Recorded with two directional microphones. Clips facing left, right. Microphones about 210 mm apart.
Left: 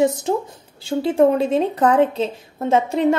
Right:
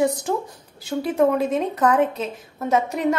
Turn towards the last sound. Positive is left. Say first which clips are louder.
# left 4 dB
turn(degrees=30)  # may be behind; listen again after turning